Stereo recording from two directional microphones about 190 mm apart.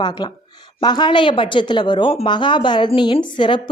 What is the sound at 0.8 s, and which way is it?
A woman's voice, 25° left (ahead or behind).